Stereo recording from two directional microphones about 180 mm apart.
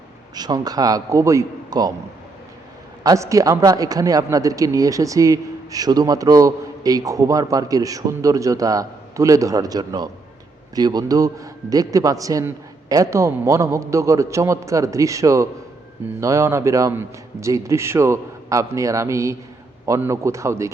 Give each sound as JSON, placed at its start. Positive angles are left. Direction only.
{"t": 0.3, "sound": "speech", "side_deg": -20}
{"t": 3.0, "sound": "a man's voice", "side_deg": -20}